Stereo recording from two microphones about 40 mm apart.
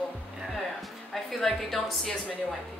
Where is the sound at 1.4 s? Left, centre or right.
Centre.